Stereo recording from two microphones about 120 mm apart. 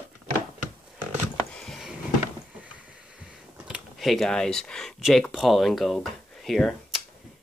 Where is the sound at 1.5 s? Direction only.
5° left (ahead or behind).